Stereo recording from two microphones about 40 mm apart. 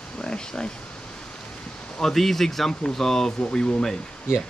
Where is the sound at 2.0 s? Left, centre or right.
Centre.